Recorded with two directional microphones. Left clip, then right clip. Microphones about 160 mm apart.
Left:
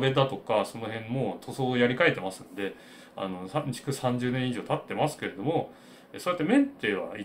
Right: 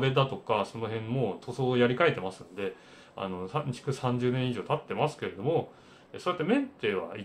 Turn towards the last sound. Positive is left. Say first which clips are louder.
# left 1 dB
turn(degrees=-15)  # may be behind; listen again after turning